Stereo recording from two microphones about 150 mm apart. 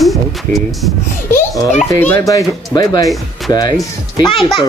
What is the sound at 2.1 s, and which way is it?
Speech, 25° left (ahead or behind).